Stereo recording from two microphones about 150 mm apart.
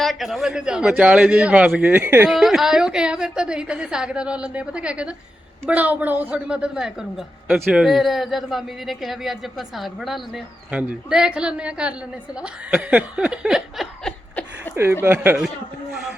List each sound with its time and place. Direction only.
0.0 s a woman's voice: centre (ahead or behind)
15.0 s speech: 15° right (ahead or behind)